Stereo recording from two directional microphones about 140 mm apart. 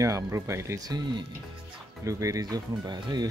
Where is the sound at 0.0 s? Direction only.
20° right (ahead or behind).